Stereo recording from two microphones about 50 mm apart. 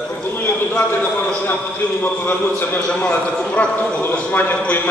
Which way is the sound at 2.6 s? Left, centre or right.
Left.